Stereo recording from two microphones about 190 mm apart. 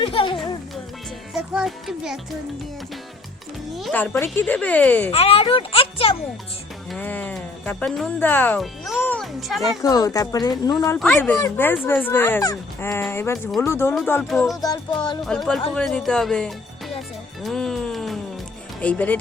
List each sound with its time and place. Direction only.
0.0 s music: 25° left (ahead or behind)
1.3 s music: 5° right (ahead or behind)
3.9 s speech: 10° left (ahead or behind)
5.1 s speech: 30° left (ahead or behind)
6.9 s speech: 10° left (ahead or behind)
9.0 s music: 5° left (ahead or behind)
9.8 s speech: 20° left (ahead or behind)
15.3 s speech: 5° left (ahead or behind)
17.4 s music: centre (ahead or behind)
18.8 s speech: 5° left (ahead or behind)